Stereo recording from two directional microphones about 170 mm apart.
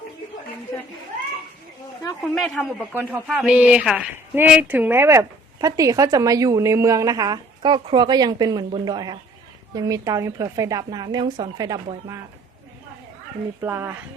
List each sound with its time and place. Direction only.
2.0 s a woman's voice: 5° left (ahead or behind)
2.9 s a woman's voice: 10° right (ahead or behind)
13.6 s speech: 15° right (ahead or behind)